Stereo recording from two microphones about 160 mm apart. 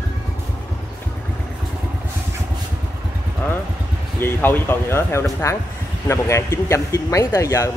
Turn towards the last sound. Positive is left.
turn(degrees=20)  # may be behind; listen again after turning